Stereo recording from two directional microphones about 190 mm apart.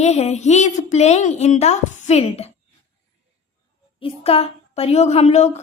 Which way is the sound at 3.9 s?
30° left (ahead or behind).